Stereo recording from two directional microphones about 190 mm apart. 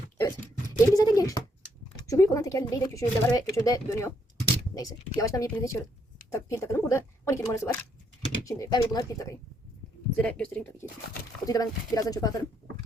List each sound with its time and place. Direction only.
0.2 s a sound: 15° left (ahead or behind)
2.0 s speech: 15° left (ahead or behind)
10.2 s speech: 5° left (ahead or behind)
11.4 s speech: 20° left (ahead or behind)